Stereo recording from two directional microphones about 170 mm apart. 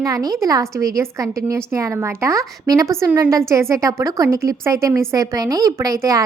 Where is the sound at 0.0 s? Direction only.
20° right (ahead or behind).